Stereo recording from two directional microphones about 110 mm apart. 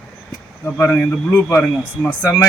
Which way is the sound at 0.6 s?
20° left (ahead or behind).